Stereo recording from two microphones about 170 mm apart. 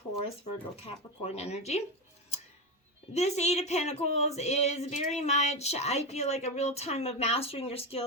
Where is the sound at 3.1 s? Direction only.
40° left (ahead or behind).